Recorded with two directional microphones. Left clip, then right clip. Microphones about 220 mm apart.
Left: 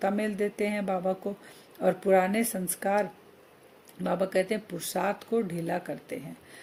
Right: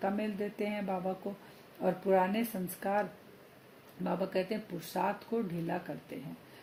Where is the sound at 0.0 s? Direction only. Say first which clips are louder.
Left 7 dB; 55° left (ahead or behind).